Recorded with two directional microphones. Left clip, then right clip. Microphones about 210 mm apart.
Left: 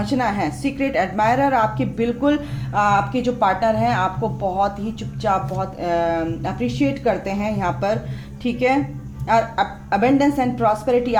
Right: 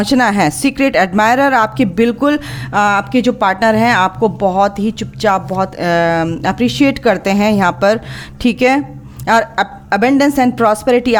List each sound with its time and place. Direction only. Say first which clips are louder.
0.0 s a woman's voice: right 9 dB; 50° right (ahead or behind)